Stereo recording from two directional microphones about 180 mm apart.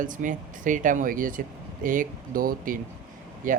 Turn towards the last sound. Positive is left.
turn(degrees=-50)  # may be behind; listen again after turning